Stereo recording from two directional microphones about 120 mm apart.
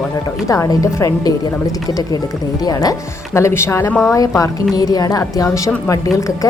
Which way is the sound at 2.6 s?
30° left (ahead or behind).